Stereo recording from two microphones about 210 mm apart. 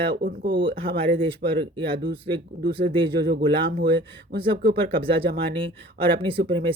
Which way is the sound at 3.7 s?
50° right (ahead or behind).